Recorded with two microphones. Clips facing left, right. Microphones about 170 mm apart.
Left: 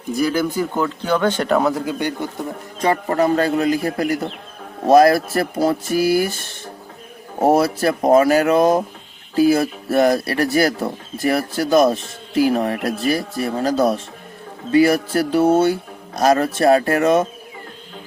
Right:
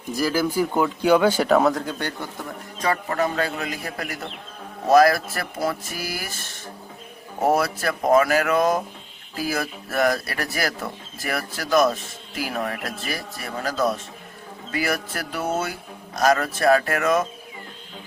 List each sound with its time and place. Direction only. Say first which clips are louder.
0.2 s speech: left 2 dB; 5° right (ahead or behind); by 2.5 s 15° left (ahead or behind)
2.8 s speech: left 6 dB; 30° left (ahead or behind)